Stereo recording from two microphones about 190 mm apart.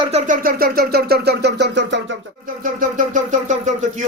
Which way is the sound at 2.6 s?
45° right (ahead or behind).